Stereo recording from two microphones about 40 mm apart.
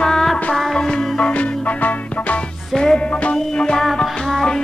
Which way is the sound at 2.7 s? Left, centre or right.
Centre.